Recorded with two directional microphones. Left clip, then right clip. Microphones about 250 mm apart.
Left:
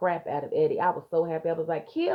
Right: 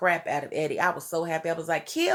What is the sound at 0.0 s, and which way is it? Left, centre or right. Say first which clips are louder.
A woman's voice: right 3 dB; right.